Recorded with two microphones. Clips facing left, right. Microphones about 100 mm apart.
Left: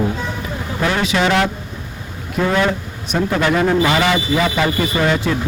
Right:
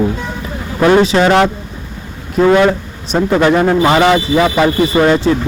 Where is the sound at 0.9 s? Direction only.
35° right (ahead or behind).